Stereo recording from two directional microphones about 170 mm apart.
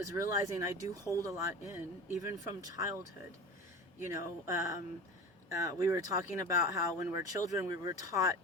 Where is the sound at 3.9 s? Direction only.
15° right (ahead or behind).